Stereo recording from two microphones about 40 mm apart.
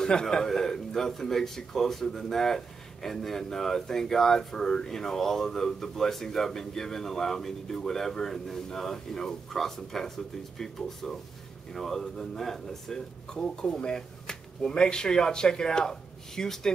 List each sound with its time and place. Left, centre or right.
0.0 s speech: centre